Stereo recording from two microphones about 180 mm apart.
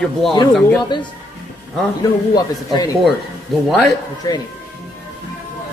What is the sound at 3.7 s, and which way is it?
Speech, centre (ahead or behind).